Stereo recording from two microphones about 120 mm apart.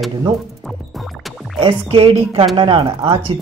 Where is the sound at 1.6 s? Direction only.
50° right (ahead or behind).